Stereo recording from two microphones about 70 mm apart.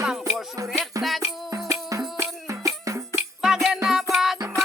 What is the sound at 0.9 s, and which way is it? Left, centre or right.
Music, right.